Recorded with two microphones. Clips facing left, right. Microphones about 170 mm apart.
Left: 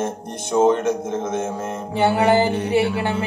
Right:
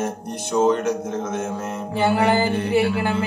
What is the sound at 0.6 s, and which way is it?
Mantra, 20° left (ahead or behind).